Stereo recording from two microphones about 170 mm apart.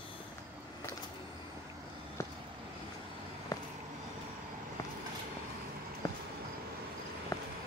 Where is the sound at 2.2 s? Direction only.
15° left (ahead or behind).